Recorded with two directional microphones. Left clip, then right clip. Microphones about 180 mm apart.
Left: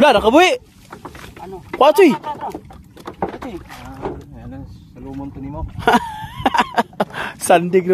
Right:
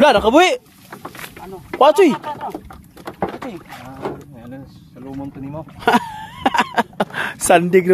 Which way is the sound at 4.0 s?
25° right (ahead or behind).